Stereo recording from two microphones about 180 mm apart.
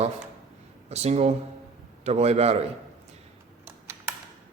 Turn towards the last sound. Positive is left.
turn(degrees=-10)  # may be behind; listen again after turning